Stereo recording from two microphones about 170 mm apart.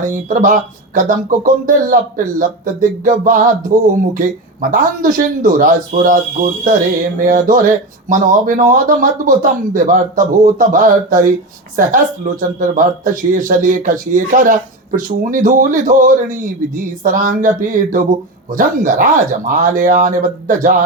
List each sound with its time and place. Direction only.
0.0 s speech: 50° right (ahead or behind)